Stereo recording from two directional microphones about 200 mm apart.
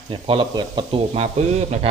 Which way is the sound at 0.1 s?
25° right (ahead or behind).